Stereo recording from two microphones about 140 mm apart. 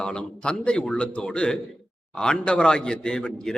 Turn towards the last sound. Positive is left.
turn(degrees=5)  # may be behind; listen again after turning